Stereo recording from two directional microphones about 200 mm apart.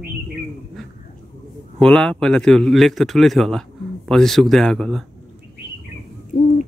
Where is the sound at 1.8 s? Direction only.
5° left (ahead or behind).